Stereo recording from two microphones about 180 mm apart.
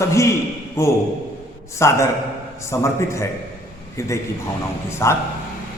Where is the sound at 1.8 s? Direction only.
15° left (ahead or behind).